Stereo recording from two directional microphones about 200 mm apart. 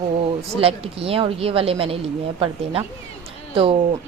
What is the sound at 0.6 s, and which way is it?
A woman's voice, 30° right (ahead or behind).